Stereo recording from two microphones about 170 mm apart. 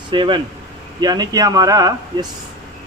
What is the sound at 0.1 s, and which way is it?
A man's voice, 30° right (ahead or behind).